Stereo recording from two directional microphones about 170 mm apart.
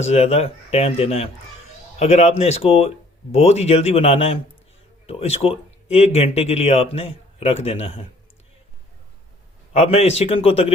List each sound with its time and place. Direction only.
0.0 s speech: 40° left (ahead or behind)
9.7 s speech: 35° left (ahead or behind)